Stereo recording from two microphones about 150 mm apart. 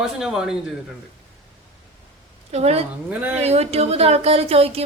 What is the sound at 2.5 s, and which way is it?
Speech, 45° right (ahead or behind).